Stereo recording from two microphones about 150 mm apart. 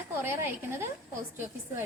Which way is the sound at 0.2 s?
15° right (ahead or behind).